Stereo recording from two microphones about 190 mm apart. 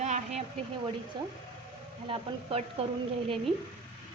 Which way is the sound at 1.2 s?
25° right (ahead or behind).